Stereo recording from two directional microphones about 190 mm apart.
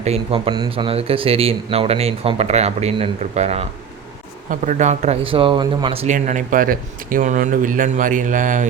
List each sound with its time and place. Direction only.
0.0 s speech: 30° right (ahead or behind)
6.1 s speech: 45° right (ahead or behind)